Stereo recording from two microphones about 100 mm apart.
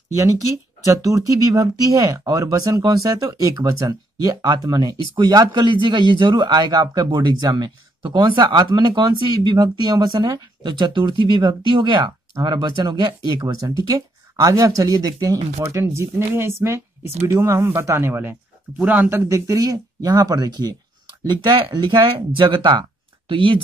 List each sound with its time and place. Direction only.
1.0 s speech: 35° right (ahead or behind)
13.4 s a man's voice: 35° right (ahead or behind); by 23.6 s 60° right (ahead or behind)